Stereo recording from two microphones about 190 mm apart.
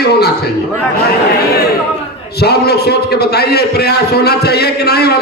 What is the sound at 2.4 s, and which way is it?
A man's voice, 60° left (ahead or behind).